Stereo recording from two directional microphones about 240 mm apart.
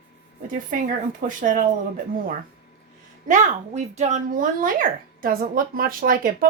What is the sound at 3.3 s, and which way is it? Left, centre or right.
Speech, right.